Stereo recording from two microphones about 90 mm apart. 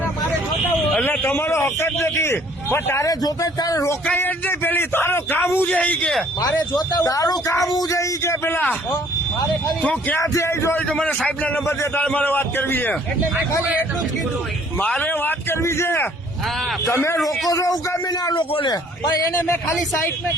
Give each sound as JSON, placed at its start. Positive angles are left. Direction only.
{"t": 1.1, "sound": "a man's voice", "side_deg": 20}
{"t": 3.1, "sound": "speech", "side_deg": 45}
{"t": 4.0, "sound": "a man's voice", "side_deg": 20}
{"t": 6.4, "sound": "speech", "side_deg": 50}
{"t": 9.8, "sound": "speech", "side_deg": 15}
{"t": 10.2, "sound": "speech", "side_deg": 30}
{"t": 10.8, "sound": "a man's voice", "side_deg": 15}
{"t": 14.8, "sound": "a man's voice", "side_deg": 15}
{"t": 18.3, "sound": "a man's voice", "side_deg": 60}